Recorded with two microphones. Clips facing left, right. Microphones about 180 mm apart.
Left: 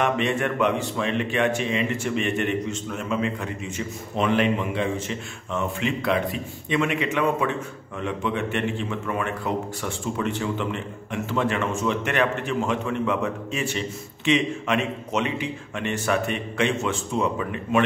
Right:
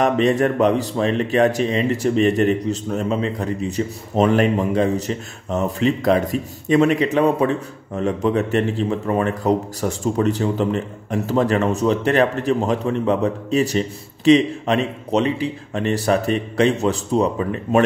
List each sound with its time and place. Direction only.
0.0 s speech: 40° right (ahead or behind)